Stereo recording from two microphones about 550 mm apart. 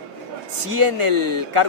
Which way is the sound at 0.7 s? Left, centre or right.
Right.